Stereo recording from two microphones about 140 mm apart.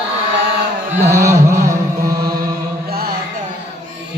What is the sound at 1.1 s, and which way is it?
Carnatic music, 20° right (ahead or behind).